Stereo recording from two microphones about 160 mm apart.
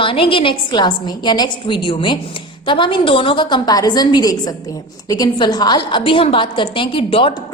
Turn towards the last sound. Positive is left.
turn(degrees=35)  # may be behind; listen again after turning